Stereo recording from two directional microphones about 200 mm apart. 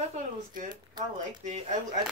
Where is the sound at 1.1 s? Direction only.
40° right (ahead or behind).